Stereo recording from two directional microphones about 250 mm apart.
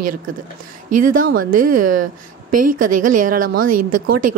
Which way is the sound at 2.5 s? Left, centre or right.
Right.